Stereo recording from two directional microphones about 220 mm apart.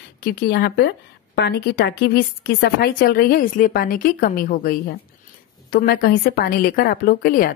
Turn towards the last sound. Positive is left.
turn(degrees=40)  # may be behind; listen again after turning